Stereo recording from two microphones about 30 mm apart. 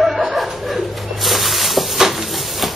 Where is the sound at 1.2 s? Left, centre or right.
Centre.